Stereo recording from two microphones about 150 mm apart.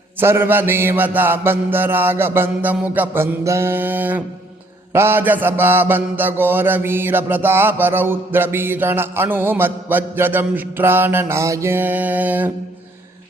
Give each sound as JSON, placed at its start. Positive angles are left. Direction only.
{"t": 0.2, "sound": "mantra", "side_deg": -15}